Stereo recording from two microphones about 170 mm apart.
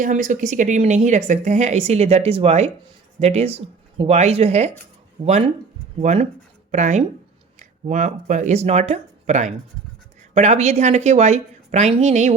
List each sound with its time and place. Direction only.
0.0 s speech: 50° right (ahead or behind)